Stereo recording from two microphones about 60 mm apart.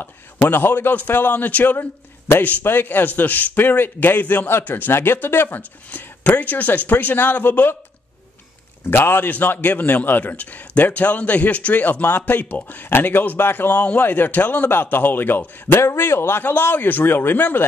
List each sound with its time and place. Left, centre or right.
0.0 s speech: left
8.9 s a man's voice: left
13.7 s a man's voice: left
15.8 s a man's voice: left
16.4 s speech: left